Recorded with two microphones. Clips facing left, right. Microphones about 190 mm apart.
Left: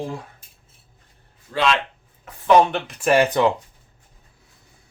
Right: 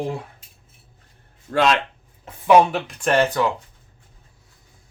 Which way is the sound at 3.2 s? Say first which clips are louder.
Left 3 dB; 20° left (ahead or behind).